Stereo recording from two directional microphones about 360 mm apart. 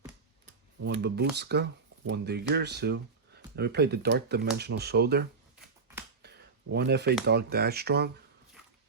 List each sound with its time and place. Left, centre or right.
1.0 s speech: right
6.2 s a sound: right
7.3 s speech: right